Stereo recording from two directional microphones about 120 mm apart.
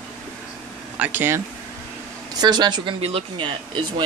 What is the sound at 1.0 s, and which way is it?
Speech, 15° right (ahead or behind).